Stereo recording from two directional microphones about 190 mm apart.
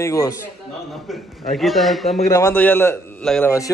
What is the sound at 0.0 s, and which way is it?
Speech, 15° left (ahead or behind).